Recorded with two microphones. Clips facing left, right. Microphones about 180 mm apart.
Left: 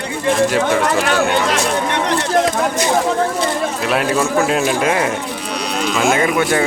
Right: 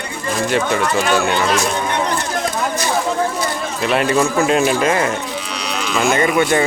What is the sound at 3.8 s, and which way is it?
Speech, centre (ahead or behind).